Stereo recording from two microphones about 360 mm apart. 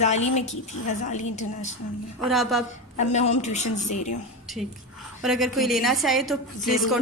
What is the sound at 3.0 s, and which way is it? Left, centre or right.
A woman's voice, centre.